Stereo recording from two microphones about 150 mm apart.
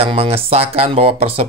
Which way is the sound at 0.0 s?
40° right (ahead or behind).